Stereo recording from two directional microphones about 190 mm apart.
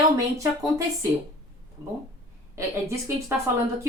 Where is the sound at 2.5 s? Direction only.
15° right (ahead or behind).